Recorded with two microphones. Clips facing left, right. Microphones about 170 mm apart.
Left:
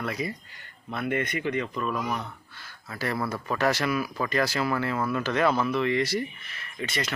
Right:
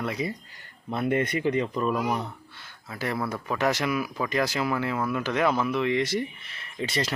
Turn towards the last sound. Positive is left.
turn(degrees=-30)  # may be behind; listen again after turning